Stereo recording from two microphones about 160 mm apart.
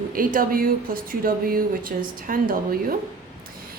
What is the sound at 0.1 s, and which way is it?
A woman's voice, 60° right (ahead or behind).